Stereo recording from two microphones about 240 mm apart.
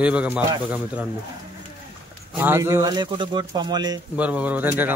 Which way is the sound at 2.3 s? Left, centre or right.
Centre.